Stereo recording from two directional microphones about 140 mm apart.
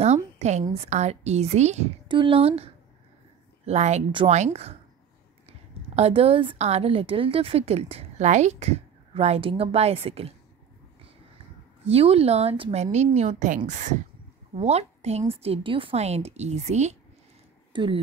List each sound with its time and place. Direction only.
0.0 s a woman's voice: 50° right (ahead or behind)
2.0 s a woman's voice: 40° right (ahead or behind)
11.8 s a woman's voice: 45° right (ahead or behind)
17.7 s speech: 35° right (ahead or behind)